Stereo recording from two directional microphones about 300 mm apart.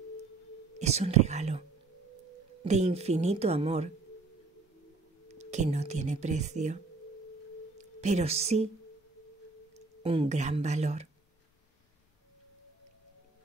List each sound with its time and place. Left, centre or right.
0.7 s speech: right
2.6 s speech: right
5.3 s speech: right
10.0 s speech: centre